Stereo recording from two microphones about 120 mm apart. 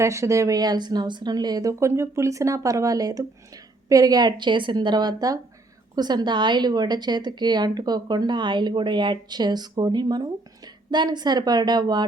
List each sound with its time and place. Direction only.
0.0 s speech: 25° right (ahead or behind)